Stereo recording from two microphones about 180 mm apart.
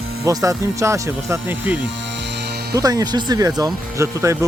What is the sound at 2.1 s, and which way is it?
Music, 75° right (ahead or behind).